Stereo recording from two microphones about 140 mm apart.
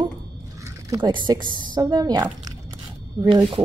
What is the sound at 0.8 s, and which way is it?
A woman's voice, 30° right (ahead or behind).